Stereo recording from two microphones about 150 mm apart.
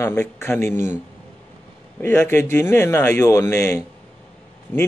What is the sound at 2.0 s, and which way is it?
Speech, 15° left (ahead or behind).